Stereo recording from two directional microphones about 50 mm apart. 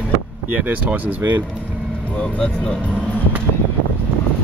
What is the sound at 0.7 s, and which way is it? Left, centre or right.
Speech, right.